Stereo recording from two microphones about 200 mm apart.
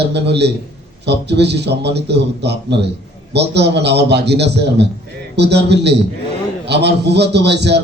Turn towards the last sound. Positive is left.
turn(degrees=-60)  # may be behind; listen again after turning